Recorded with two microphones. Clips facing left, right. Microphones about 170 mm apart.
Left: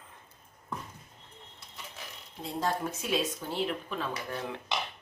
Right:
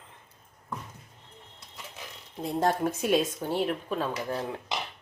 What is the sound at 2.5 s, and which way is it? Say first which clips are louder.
Speech: right 5 dB; 55° right (ahead or behind).